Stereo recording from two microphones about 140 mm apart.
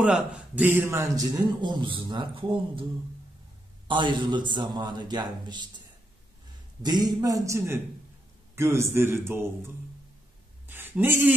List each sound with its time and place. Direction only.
0.0 s a man's voice: 5° right (ahead or behind); by 5.7 s 30° right (ahead or behind)
6.8 s a man's voice: 30° right (ahead or behind)
10.7 s speech: 15° right (ahead or behind)